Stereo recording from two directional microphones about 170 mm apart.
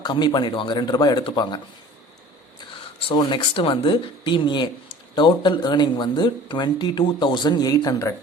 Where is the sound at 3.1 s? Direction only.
30° left (ahead or behind).